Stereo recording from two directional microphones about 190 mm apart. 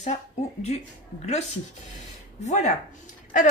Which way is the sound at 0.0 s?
35° left (ahead or behind).